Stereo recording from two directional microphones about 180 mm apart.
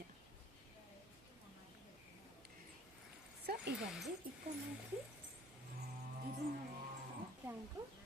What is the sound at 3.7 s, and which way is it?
Speech, centre (ahead or behind).